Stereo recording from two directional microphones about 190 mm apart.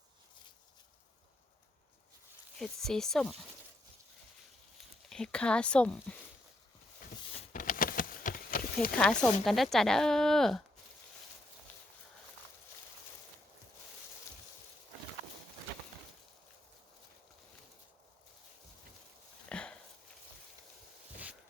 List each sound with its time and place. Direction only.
2.6 s speech: centre (ahead or behind)
5.0 s speech: 5° left (ahead or behind)
7.5 s a sound: 45° left (ahead or behind)
9.0 s speech: 5° left (ahead or behind)
11.7 s walk: 10° left (ahead or behind)
19.5 s a sound: 5° left (ahead or behind)